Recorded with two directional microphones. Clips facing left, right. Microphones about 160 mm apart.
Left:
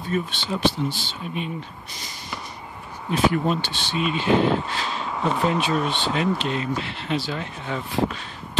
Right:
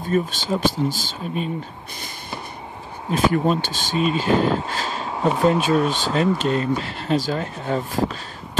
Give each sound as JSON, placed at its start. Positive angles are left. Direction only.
{"t": 0.1, "sound": "speech", "side_deg": -40}
{"t": 3.1, "sound": "speech", "side_deg": -40}